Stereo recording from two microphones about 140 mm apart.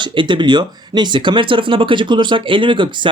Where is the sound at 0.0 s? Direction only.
35° right (ahead or behind).